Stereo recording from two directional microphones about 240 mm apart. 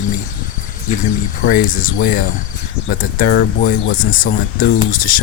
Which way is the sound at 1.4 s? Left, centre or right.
Left.